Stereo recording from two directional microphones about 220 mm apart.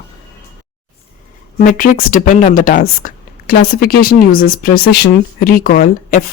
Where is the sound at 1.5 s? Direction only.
40° left (ahead or behind).